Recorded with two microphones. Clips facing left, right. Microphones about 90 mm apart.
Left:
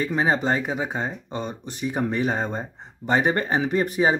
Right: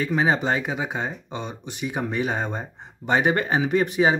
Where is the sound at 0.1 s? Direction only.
5° right (ahead or behind).